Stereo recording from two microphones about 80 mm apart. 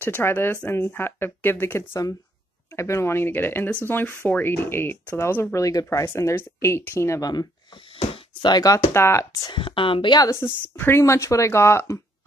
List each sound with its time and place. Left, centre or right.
0.0 s speech: left
7.2 s speech: left
8.9 s speech: left
9.5 s speech: left
10.4 s speech: left